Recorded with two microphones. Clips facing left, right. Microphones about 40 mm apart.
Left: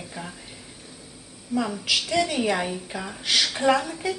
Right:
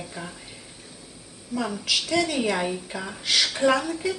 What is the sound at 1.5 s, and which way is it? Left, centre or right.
A woman's voice, centre.